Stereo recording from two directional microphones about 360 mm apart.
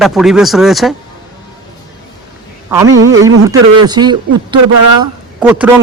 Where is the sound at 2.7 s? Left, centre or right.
Centre.